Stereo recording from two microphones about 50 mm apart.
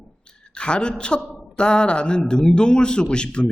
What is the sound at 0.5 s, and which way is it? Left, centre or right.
A man's voice, centre.